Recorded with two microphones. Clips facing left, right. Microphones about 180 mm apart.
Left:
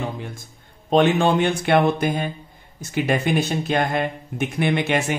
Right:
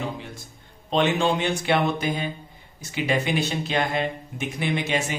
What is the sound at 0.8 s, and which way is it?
A man's voice, 50° left (ahead or behind).